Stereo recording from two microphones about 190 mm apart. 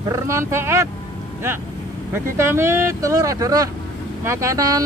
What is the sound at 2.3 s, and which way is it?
Speech, 15° right (ahead or behind).